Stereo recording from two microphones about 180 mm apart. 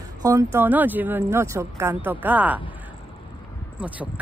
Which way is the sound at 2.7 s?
10° right (ahead or behind).